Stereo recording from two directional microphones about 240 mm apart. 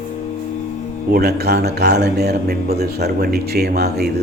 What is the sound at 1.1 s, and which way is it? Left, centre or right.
A man's voice, right.